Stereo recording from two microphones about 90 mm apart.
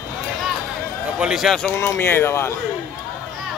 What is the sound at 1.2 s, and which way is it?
Speech, 5° right (ahead or behind).